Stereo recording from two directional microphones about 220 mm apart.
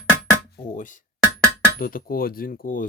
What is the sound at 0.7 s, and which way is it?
Speech, 35° left (ahead or behind).